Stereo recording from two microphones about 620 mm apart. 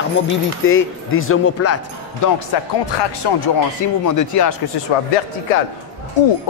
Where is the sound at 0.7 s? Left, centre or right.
Centre.